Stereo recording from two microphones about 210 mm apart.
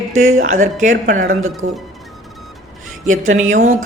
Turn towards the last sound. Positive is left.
turn(degrees=-35)  # may be behind; listen again after turning